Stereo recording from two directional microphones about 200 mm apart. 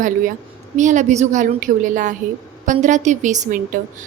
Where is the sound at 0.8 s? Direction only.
40° right (ahead or behind).